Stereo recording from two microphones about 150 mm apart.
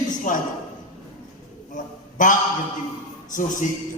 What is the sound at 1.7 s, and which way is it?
A man's voice, 55° left (ahead or behind).